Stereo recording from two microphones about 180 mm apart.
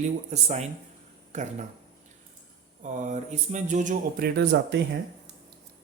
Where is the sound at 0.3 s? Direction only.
40° right (ahead or behind).